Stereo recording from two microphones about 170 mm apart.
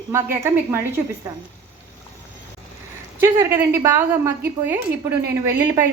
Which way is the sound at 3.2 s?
15° right (ahead or behind).